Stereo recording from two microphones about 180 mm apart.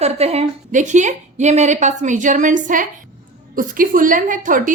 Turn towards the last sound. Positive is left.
turn(degrees=-45)  # may be behind; listen again after turning